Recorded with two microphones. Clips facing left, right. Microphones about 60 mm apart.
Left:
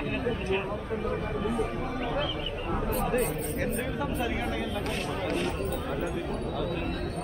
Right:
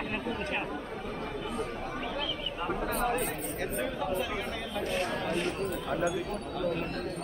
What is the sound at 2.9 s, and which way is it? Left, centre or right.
Speech, centre.